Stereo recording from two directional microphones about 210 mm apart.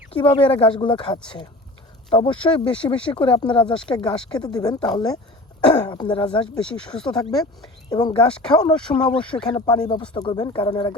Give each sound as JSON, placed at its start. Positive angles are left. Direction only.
{"t": 0.2, "sound": "speech", "side_deg": 25}
{"t": 4.1, "sound": "speech", "side_deg": 5}
{"t": 4.4, "sound": "speech", "side_deg": 20}